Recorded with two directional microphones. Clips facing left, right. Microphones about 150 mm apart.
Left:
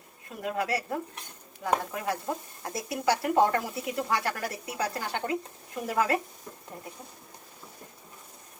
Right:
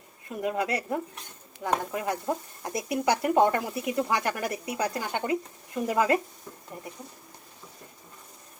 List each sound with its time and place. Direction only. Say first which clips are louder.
0.4 s speech: right 2 dB; 20° right (ahead or behind)